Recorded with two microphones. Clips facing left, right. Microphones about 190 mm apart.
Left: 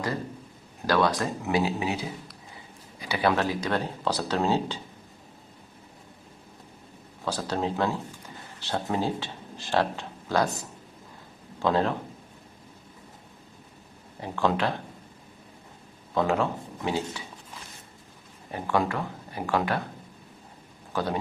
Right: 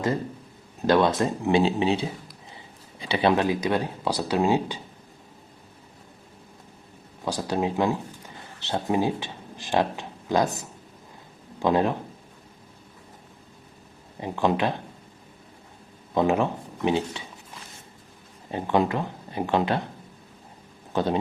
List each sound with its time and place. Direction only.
0.8 s speech: 20° right (ahead or behind)
7.3 s speech: 15° right (ahead or behind)
11.6 s speech: 15° right (ahead or behind)
14.2 s speech: 15° right (ahead or behind)
16.1 s speech: 20° right (ahead or behind)
18.5 s speech: 20° right (ahead or behind)
20.9 s speech: 25° right (ahead or behind)